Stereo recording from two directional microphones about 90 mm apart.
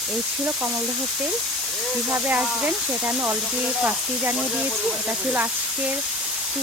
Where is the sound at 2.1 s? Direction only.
20° right (ahead or behind).